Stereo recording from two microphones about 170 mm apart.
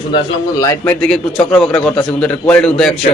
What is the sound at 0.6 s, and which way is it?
Speech, 20° left (ahead or behind).